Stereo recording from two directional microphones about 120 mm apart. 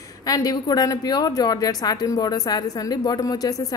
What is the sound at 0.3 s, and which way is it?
A woman's voice, 30° left (ahead or behind).